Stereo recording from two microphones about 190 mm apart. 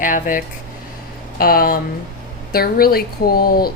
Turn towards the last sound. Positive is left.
turn(degrees=50)  # may be behind; listen again after turning